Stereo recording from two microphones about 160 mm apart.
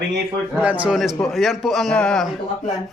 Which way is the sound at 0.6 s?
10° right (ahead or behind).